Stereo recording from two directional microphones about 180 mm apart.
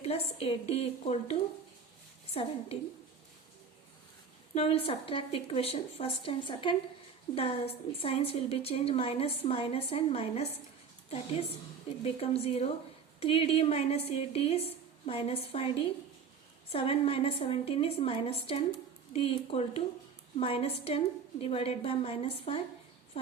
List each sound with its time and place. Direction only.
0.0 s a woman's voice: 35° left (ahead or behind)
4.5 s a woman's voice: 35° left (ahead or behind)
12.0 s a woman's voice: 35° left (ahead or behind)